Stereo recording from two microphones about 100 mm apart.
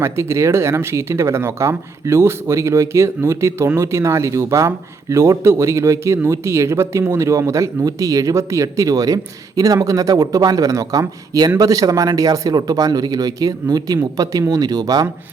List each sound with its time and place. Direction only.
0.0 s a man's voice: 30° right (ahead or behind)